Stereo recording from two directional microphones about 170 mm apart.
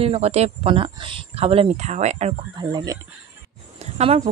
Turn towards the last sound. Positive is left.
turn(degrees=-40)  # may be behind; listen again after turning